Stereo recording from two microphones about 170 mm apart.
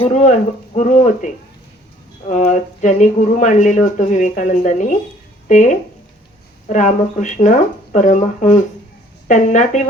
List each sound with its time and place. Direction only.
0.0 s speech: 45° left (ahead or behind)